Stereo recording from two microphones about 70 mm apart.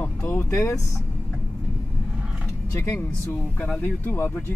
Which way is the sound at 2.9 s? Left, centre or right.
Left.